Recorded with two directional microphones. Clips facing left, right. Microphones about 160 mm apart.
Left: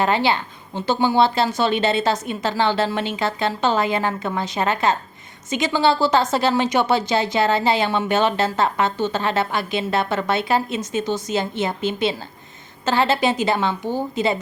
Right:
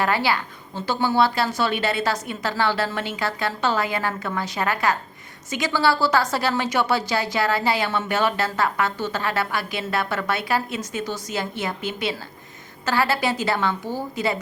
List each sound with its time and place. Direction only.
0.0 s a woman's voice: 20° left (ahead or behind)